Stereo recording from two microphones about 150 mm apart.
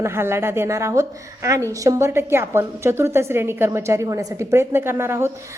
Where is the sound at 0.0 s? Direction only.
15° right (ahead or behind).